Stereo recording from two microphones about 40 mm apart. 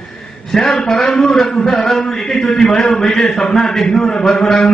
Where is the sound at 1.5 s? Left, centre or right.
Centre.